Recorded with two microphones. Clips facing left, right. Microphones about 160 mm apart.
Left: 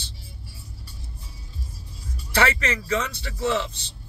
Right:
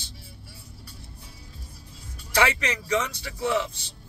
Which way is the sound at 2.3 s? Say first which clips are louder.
Left 1 dB; 15° right (ahead or behind).